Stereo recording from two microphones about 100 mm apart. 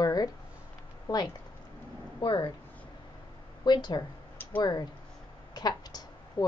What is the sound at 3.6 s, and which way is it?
Speech, 45° left (ahead or behind).